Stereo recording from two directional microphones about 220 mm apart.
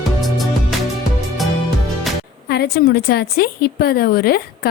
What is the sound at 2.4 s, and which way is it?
A woman's voice, 45° left (ahead or behind).